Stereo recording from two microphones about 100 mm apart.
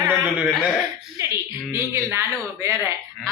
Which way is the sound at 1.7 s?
25° right (ahead or behind).